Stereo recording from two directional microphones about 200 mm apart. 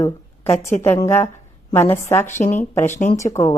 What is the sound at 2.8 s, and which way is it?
Speech, 35° left (ahead or behind).